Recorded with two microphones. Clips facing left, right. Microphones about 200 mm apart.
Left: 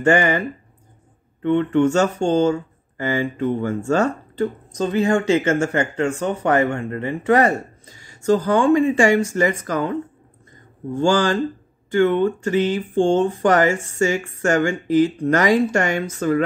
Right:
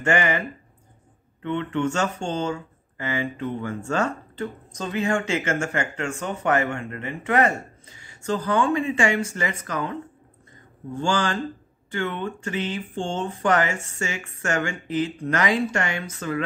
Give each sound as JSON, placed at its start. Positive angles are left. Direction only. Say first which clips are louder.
{"t": 0.0, "sound": "speech", "louder": "left 6 dB", "side_deg": 40}
{"t": 1.4, "sound": "speech", "louder": "left 8 dB", "side_deg": 45}
{"t": 11.0, "sound": "speech", "louder": "left 7 dB", "side_deg": 40}